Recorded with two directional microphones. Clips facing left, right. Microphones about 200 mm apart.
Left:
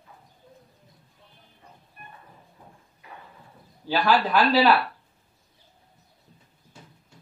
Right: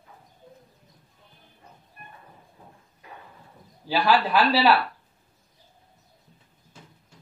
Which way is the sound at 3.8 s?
5° right (ahead or behind).